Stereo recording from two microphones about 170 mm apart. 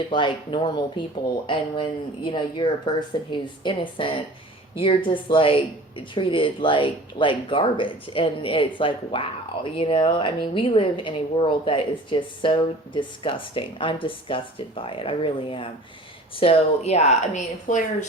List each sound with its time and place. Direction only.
0.1 s a woman's voice: 30° left (ahead or behind); by 17.8 s 45° left (ahead or behind)